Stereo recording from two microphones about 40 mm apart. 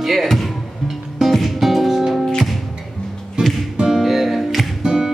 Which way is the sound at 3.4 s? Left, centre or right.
Right.